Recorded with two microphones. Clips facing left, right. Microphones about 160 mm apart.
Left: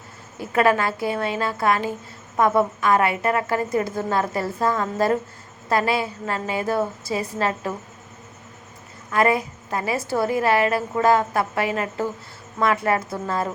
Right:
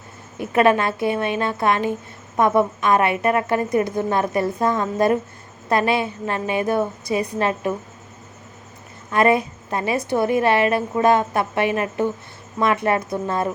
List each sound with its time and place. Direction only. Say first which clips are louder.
0.3 s a woman's voice: right 3 dB; 20° right (ahead or behind)
9.0 s a woman's voice: right 3 dB; 25° right (ahead or behind)